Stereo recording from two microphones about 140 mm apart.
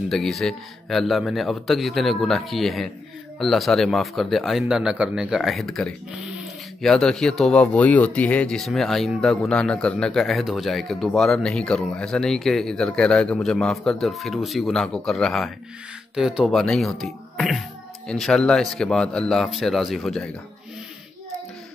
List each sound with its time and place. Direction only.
0.1 s speech: centre (ahead or behind)